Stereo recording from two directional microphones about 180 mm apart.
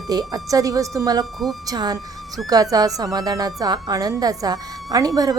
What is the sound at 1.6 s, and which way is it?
Speech, 20° right (ahead or behind).